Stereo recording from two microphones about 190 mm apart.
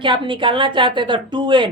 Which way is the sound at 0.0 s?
25° right (ahead or behind).